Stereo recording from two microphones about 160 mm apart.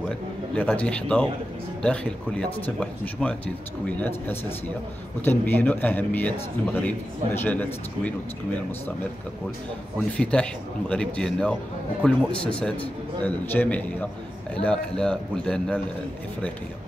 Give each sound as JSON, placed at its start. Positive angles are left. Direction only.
{"t": 0.6, "sound": "speech", "side_deg": 10}
{"t": 10.1, "sound": "a man's voice", "side_deg": 5}